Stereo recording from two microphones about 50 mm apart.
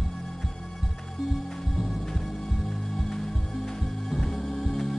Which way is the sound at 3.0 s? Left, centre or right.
Centre.